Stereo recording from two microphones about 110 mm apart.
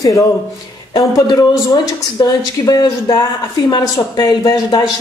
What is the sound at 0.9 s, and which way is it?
A man's voice, 35° left (ahead or behind).